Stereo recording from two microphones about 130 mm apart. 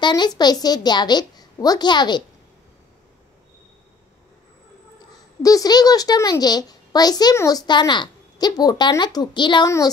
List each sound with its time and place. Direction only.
0.0 s a child's voice: 35° left (ahead or behind)
5.4 s a child's voice: 30° left (ahead or behind)